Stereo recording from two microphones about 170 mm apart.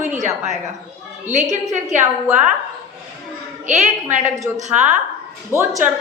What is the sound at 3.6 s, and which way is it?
Speech, 45° right (ahead or behind).